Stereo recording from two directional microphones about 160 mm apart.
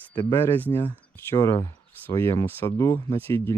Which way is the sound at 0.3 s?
15° left (ahead or behind).